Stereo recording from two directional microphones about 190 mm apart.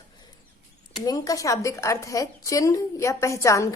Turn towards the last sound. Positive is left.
turn(degrees=15)  # may be behind; listen again after turning